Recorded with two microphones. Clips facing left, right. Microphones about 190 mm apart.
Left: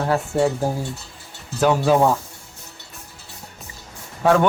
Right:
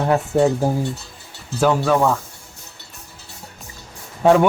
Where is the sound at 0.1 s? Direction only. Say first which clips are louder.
Right 3 dB; 20° right (ahead or behind).